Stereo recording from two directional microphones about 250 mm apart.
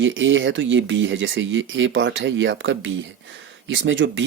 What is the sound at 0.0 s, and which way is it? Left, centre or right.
Speech, right.